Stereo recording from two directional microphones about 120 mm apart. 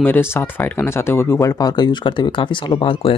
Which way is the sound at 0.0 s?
20° left (ahead or behind).